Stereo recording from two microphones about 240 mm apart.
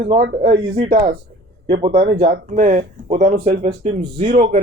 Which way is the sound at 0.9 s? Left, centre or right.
Right.